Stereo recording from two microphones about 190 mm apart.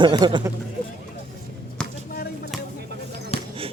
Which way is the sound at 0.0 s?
25° right (ahead or behind).